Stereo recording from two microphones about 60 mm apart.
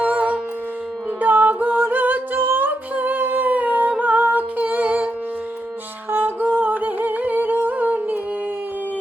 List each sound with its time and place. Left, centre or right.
0.0 s music: right
1.2 s a capella: right
6.1 s music: right
6.6 s humming: right